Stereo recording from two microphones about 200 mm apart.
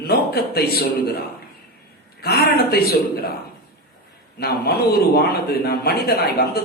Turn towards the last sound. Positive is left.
turn(degrees=50)  # may be behind; listen again after turning